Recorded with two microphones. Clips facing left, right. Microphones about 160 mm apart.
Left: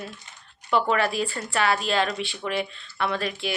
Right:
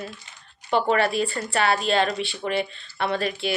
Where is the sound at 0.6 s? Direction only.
35° right (ahead or behind).